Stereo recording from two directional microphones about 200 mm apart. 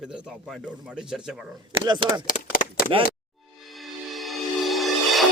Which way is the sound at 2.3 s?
40° left (ahead or behind).